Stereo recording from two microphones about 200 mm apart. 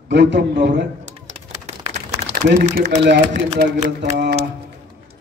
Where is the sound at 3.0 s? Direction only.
55° right (ahead or behind).